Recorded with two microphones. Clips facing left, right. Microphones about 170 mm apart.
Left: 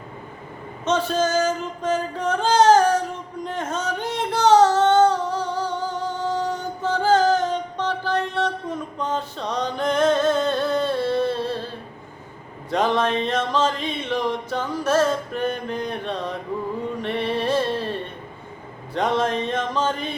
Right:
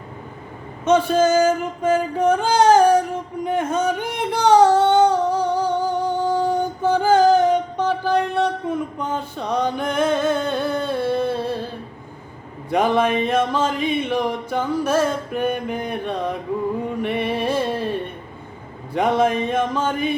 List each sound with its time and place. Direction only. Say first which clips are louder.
0.9 s a sound: right 5 dB; 10° right (ahead or behind)
3.4 s singing: right 7 dB; 10° right (ahead or behind)
6.8 s music: right 3 dB; 10° right (ahead or behind)
12.7 s music: right 3 dB; 10° right (ahead or behind)
18.9 s music: right 4 dB; 10° right (ahead or behind)